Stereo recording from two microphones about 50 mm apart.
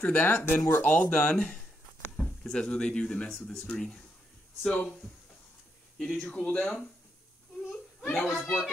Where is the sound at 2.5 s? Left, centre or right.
Centre.